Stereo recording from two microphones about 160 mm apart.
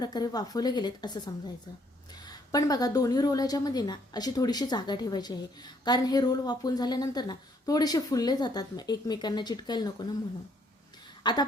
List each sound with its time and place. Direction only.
0.0 s a woman's voice: 25° left (ahead or behind)
11.2 s a woman's voice: 25° left (ahead or behind)